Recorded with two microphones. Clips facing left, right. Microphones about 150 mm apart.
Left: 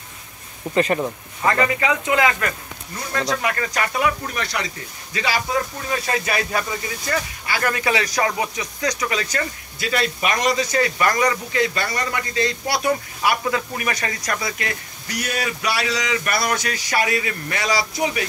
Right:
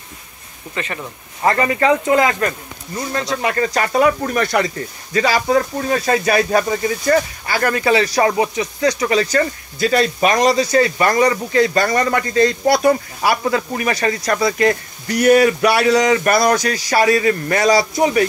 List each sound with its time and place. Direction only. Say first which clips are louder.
0.7 s speech: left 7 dB; 45° left (ahead or behind)
1.4 s speech: right 4 dB; 35° right (ahead or behind)